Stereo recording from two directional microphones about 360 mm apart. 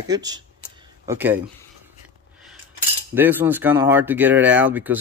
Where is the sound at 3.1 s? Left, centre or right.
Centre.